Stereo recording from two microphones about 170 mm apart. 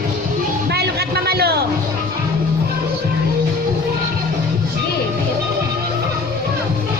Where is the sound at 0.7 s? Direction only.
70° right (ahead or behind).